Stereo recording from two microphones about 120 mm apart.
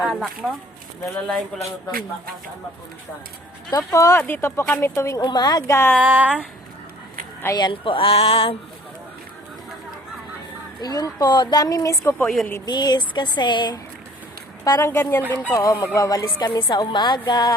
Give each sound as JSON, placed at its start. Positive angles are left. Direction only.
{"t": 0.0, "sound": "a woman's voice", "side_deg": 0}
{"t": 1.5, "sound": "speech", "side_deg": 5}
{"t": 3.9, "sound": "speech", "side_deg": 25}
{"t": 5.2, "sound": "speech", "side_deg": 35}
{"t": 6.0, "sound": "a sound", "side_deg": -10}
{"t": 7.5, "sound": "speech", "side_deg": 40}
{"t": 10.8, "sound": "speech", "side_deg": 30}
{"t": 12.1, "sound": "a woman's voice", "side_deg": 5}
{"t": 12.6, "sound": "speech", "side_deg": 35}
{"t": 14.6, "sound": "speech", "side_deg": 25}